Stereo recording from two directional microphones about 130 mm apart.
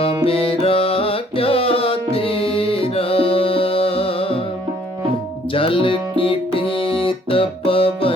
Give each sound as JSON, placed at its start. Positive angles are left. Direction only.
{"t": 0.3, "sound": "music", "side_deg": 45}
{"t": 5.5, "sound": "music", "side_deg": 45}